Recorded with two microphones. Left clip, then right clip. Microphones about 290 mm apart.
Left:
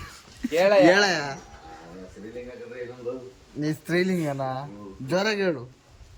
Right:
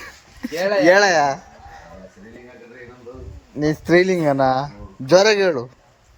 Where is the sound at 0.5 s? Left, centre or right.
Left.